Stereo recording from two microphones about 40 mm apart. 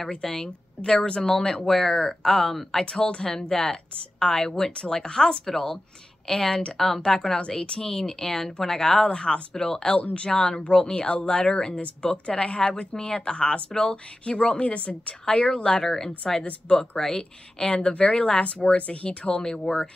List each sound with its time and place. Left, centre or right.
0.0 s speech: centre
2.8 s speech: left
9.9 s speech: left
12.9 s speech: centre
15.2 s speech: centre
16.4 s speech: left
16.9 s speech: centre